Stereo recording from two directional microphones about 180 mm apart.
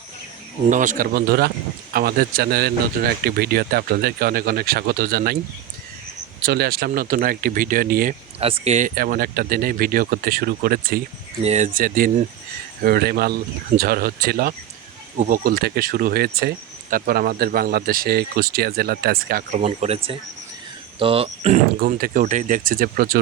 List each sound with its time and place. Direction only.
0.7 s speech: 45° right (ahead or behind)
6.4 s speech: 60° right (ahead or behind)
8.4 s speech: 30° right (ahead or behind)
9.0 s speech: 55° right (ahead or behind)
11.4 s speech: 40° right (ahead or behind)
21.8 s speech: 55° right (ahead or behind)